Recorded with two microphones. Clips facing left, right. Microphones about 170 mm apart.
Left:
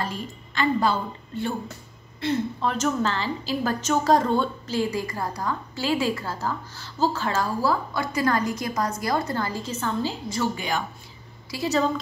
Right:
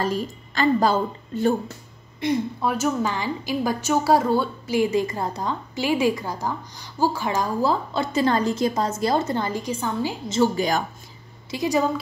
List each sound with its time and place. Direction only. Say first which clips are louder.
0.0 s a woman's voice: right 6 dB; 40° right (ahead or behind)
2.1 s a woman's voice: right 2 dB; 15° right (ahead or behind)
10.5 s a woman's voice: right 6 dB; 40° right (ahead or behind)
11.5 s a woman's voice: right 2 dB; 15° right (ahead or behind)